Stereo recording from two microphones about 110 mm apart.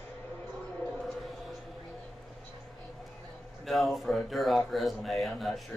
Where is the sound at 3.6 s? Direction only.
Centre (ahead or behind).